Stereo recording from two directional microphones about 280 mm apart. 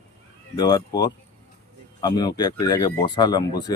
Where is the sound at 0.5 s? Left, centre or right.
Centre.